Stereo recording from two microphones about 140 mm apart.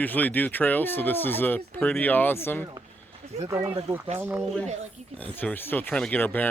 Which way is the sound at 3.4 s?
25° right (ahead or behind).